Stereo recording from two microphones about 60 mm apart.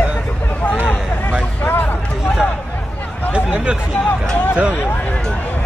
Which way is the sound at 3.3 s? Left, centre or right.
Centre.